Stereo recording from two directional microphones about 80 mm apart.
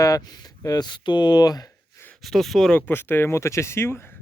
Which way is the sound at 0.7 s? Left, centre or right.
Left.